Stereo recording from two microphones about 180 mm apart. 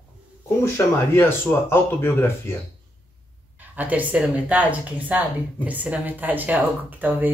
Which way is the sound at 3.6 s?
10° right (ahead or behind).